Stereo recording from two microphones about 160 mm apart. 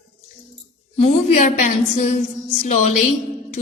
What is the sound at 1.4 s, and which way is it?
Speech, 50° left (ahead or behind).